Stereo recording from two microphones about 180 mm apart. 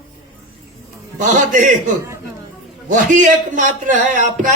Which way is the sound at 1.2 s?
45° right (ahead or behind).